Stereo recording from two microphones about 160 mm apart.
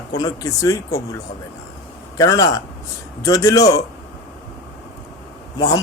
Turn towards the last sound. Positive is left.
turn(degrees=20)  # may be behind; listen again after turning